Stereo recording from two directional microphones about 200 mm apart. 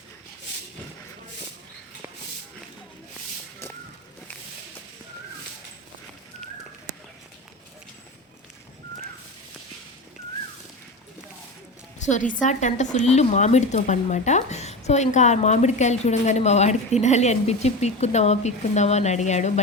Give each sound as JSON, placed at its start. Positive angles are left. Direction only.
{"t": 11.9, "sound": "speech", "side_deg": 35}